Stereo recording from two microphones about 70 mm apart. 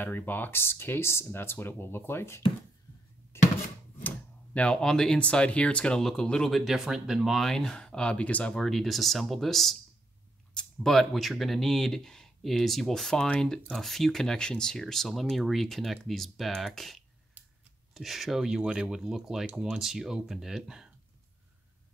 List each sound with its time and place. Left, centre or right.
0.0 s speech: left
3.3 s a sound: left
4.6 s speech: centre
6.5 s speech: centre
8.5 s speech: centre